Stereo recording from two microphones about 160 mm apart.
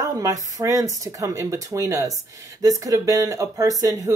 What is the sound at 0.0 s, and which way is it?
Speech, 20° right (ahead or behind).